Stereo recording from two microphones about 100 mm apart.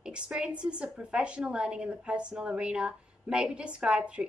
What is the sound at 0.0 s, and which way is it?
A woman's voice, 10° right (ahead or behind).